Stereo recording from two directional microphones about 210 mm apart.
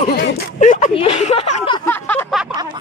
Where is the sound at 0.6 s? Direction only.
35° left (ahead or behind).